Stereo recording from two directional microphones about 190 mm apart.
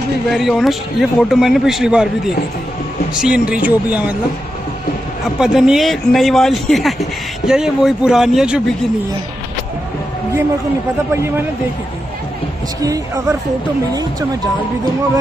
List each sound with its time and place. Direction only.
0.3 s speech: centre (ahead or behind)
3.2 s speech: 5° right (ahead or behind)
5.4 s speech: 5° right (ahead or behind)
11.1 s speech: 10° right (ahead or behind)
12.8 s speech: 15° right (ahead or behind)